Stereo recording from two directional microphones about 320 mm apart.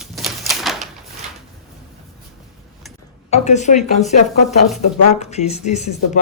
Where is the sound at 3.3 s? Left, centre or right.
Left.